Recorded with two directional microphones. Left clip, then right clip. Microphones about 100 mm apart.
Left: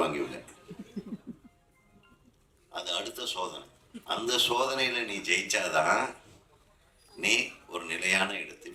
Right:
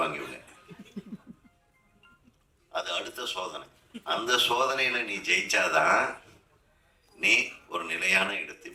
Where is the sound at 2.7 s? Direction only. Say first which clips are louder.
Right 2 dB; 15° left (ahead or behind).